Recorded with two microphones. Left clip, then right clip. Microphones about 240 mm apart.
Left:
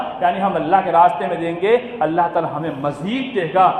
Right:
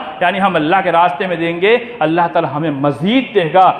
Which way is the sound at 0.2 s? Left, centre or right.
Right.